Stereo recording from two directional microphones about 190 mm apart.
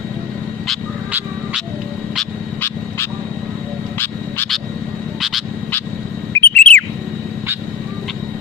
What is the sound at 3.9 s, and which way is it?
Duck, 10° left (ahead or behind).